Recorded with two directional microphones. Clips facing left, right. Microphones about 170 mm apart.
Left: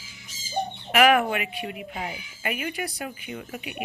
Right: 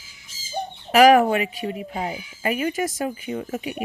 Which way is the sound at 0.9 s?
35° right (ahead or behind).